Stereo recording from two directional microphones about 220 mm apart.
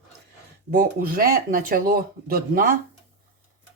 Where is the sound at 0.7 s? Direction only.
40° right (ahead or behind).